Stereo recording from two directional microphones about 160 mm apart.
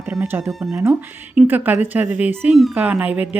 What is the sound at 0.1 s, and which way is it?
Speech, 10° right (ahead or behind).